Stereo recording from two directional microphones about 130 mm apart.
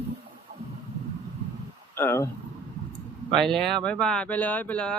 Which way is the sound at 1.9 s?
20° left (ahead or behind).